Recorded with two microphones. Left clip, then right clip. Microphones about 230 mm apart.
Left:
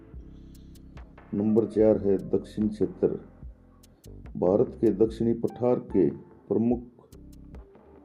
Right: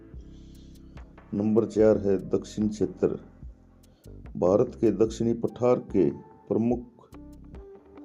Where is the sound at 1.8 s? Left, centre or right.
Right.